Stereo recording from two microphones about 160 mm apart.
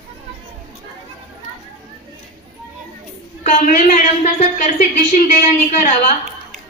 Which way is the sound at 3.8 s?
45° left (ahead or behind).